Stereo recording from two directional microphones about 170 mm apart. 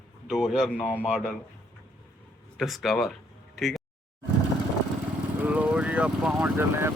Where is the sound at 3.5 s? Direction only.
Centre (ahead or behind).